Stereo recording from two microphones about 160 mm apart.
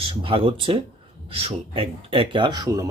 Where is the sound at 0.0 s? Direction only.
35° right (ahead or behind).